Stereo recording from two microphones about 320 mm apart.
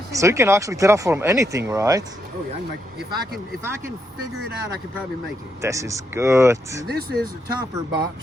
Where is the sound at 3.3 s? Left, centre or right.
Centre.